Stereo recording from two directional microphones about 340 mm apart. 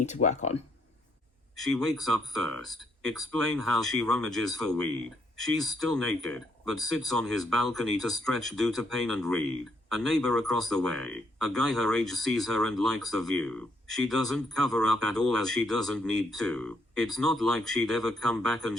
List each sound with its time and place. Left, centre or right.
0.0 s speech: left
1.6 s speech: centre